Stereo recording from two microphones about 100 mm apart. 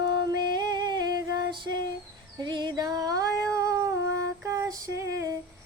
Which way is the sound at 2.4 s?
45° right (ahead or behind).